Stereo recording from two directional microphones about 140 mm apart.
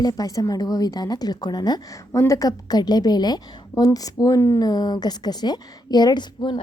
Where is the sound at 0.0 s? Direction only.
25° left (ahead or behind).